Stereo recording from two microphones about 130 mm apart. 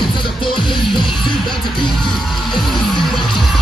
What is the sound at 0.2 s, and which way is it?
Music, 40° left (ahead or behind).